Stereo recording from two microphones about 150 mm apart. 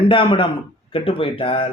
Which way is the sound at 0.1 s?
35° left (ahead or behind).